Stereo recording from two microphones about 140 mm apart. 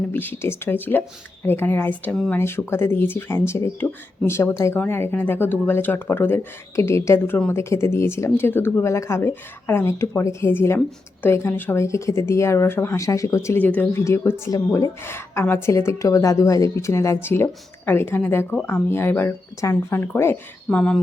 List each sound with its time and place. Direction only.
0.1 s speech: 15° left (ahead or behind)